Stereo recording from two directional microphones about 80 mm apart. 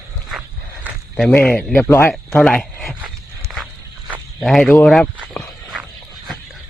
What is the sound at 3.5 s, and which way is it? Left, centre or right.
Walk, centre.